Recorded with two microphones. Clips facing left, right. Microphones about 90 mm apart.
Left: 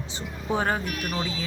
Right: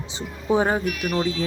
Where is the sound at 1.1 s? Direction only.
Centre (ahead or behind).